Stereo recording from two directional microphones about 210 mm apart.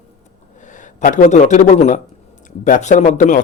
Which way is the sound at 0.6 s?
35° left (ahead or behind).